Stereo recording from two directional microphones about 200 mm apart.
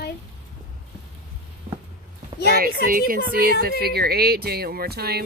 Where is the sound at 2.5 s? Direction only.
45° right (ahead or behind).